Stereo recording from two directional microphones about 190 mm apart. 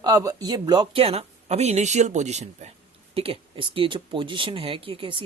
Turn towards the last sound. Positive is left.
turn(degrees=-25)  # may be behind; listen again after turning